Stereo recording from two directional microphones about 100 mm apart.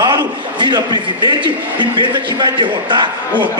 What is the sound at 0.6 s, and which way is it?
A man's voice, 45° right (ahead or behind).